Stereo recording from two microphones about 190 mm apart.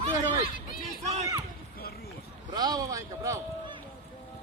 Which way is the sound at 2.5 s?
20° right (ahead or behind).